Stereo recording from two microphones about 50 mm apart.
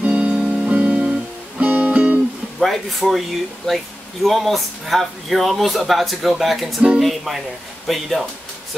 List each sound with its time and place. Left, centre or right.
0.0 s music: centre
2.6 s speech: centre